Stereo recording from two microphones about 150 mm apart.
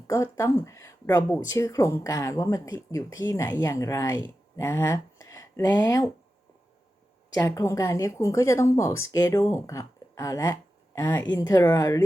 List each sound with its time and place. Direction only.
0.1 s a woman's voice: 20° left (ahead or behind)
7.3 s a woman's voice: 20° left (ahead or behind)